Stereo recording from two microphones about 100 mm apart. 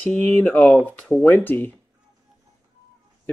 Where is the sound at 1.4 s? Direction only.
20° left (ahead or behind).